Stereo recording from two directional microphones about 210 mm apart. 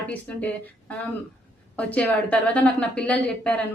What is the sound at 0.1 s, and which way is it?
A woman's voice, 5° left (ahead or behind).